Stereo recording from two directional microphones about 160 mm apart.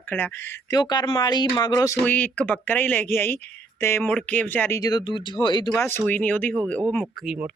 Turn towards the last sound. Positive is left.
turn(degrees=5)  # may be behind; listen again after turning